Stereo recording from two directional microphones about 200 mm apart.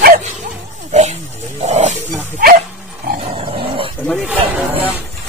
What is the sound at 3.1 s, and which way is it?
Dog, 30° right (ahead or behind).